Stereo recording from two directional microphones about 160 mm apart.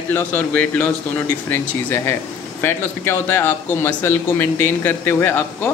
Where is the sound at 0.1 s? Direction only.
10° left (ahead or behind).